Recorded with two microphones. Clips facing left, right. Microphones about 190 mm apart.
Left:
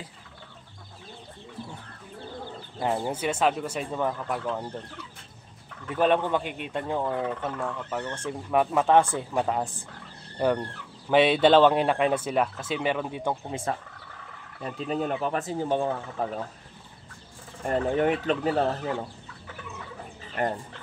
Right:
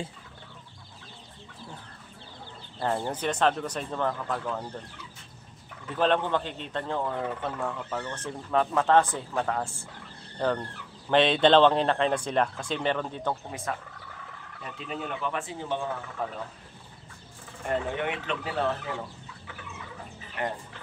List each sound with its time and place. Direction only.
2.8 s speech: 10° left (ahead or behind)
5.9 s speech: 10° left (ahead or behind)
7.2 s speech: centre (ahead or behind); by 9.8 s 15° left (ahead or behind)
11.1 s speech: 10° left (ahead or behind)
13.7 s speech: 30° left (ahead or behind)
17.6 s speech: 40° left (ahead or behind)
20.4 s fowl: 45° left (ahead or behind)